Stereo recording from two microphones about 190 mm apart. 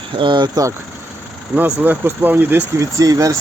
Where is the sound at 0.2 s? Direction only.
25° right (ahead or behind).